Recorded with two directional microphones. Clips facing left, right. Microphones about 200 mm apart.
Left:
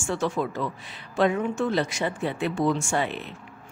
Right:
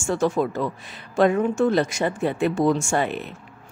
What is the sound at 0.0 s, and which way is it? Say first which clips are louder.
A woman's voice: right 5 dB; 45° right (ahead or behind).